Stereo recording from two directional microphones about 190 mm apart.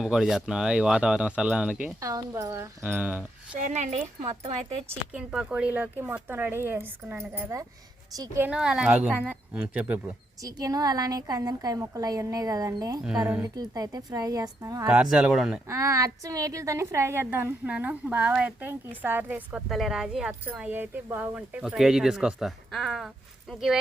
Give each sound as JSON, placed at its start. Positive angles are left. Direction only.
{"t": 0.0, "sound": "speech", "side_deg": 0}
{"t": 2.0, "sound": "a woman's voice", "side_deg": -15}
{"t": 3.6, "sound": "speech", "side_deg": -40}
{"t": 5.1, "sound": "a woman's voice", "side_deg": -5}
{"t": 10.4, "sound": "a woman's voice", "side_deg": -20}
{"t": 15.1, "sound": "speech", "side_deg": -5}
{"t": 15.7, "sound": "a woman's voice", "side_deg": -15}